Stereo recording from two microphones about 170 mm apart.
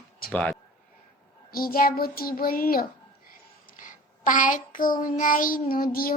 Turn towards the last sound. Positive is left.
turn(degrees=60)  # may be behind; listen again after turning